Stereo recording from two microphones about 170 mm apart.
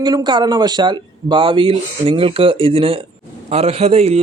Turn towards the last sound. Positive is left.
turn(degrees=-40)  # may be behind; listen again after turning